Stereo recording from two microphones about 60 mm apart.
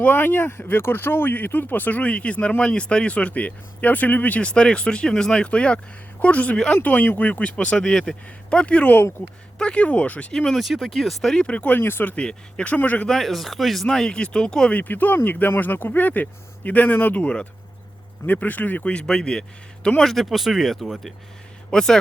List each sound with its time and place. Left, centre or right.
0.0 s speech: left
7.3 s speech: left
10.3 s speech: centre
10.6 s speech: centre; by 11.8 s left
11.8 s speech: left
12.1 s speech: centre
13.1 s speech: centre
14.7 s speech: left
20.1 s speech: centre
21.7 s speech: centre